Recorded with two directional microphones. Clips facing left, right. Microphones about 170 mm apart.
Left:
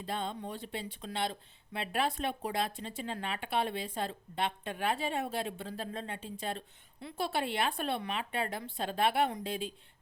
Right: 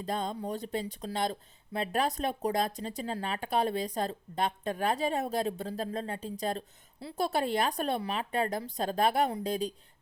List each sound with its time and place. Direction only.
0.0 s speech: 40° right (ahead or behind)